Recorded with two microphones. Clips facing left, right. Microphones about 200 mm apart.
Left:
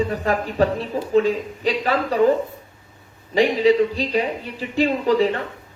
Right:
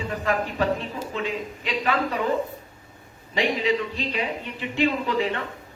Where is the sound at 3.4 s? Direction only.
35° left (ahead or behind).